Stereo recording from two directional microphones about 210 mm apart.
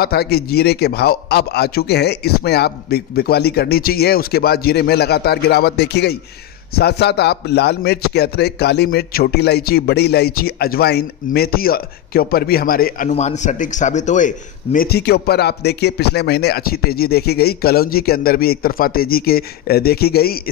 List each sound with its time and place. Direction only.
0.0 s a man's voice: 50° left (ahead or behind)
13.1 s a man's voice: 35° left (ahead or behind)